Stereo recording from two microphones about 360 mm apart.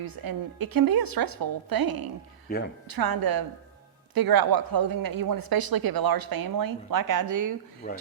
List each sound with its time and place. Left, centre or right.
0.0 s speech: right
7.8 s speech: left